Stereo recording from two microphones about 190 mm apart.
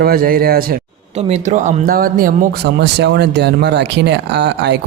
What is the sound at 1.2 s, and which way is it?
A man's voice, 35° right (ahead or behind).